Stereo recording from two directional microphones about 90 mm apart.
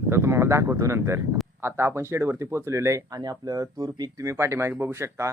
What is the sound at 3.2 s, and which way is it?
Speech, 45° right (ahead or behind).